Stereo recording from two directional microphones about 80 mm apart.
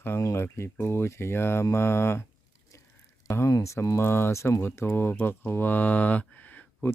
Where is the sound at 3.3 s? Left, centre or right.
Left.